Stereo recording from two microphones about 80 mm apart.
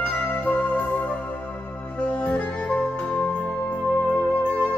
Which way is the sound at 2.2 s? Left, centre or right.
Centre.